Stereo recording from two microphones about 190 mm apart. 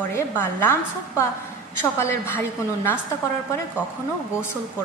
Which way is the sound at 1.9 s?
15° left (ahead or behind).